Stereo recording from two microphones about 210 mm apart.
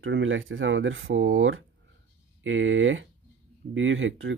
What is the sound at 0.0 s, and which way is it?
Speech, 65° right (ahead or behind).